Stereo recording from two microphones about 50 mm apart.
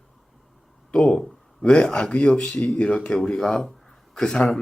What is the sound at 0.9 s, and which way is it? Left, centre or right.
Speech, centre.